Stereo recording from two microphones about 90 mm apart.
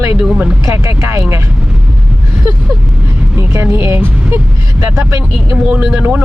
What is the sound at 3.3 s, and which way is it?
Speech, 25° right (ahead or behind).